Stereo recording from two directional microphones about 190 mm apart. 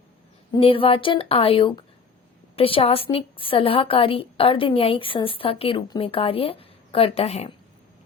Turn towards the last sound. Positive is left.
turn(degrees=35)  # may be behind; listen again after turning